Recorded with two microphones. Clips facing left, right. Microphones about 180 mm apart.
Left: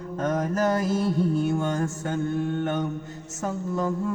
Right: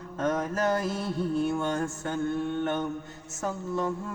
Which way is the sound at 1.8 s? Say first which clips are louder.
Left 2 dB; 40° left (ahead or behind).